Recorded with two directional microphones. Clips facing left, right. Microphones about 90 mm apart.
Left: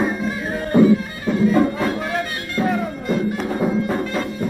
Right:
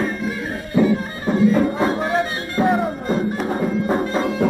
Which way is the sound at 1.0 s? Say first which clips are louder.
Right 1 dB; 30° right (ahead or behind).